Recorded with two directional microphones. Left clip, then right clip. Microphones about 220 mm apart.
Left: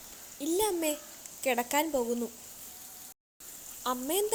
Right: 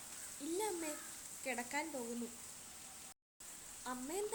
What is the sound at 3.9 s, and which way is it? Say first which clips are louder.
Speech: left 13 dB; 35° left (ahead or behind).